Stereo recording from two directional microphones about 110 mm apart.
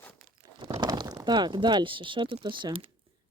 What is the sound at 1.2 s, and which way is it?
Speech, 45° right (ahead or behind).